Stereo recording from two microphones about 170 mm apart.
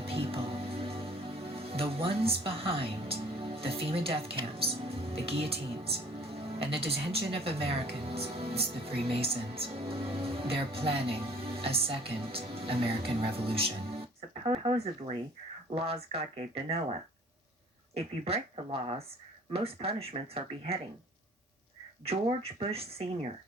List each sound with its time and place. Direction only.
0.0 s speech: 35° right (ahead or behind)
17.9 s speech: 35° right (ahead or behind)
22.0 s speech: 35° right (ahead or behind)